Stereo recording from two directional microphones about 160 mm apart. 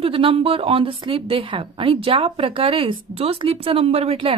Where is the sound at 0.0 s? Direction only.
35° right (ahead or behind).